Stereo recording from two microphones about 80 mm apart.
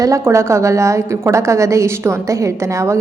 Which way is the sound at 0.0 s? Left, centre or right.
Right.